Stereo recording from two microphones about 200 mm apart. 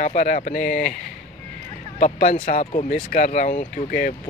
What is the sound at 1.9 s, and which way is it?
Speech, 35° left (ahead or behind).